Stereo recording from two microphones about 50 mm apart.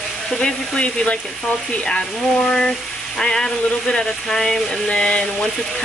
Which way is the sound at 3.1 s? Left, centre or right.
Centre.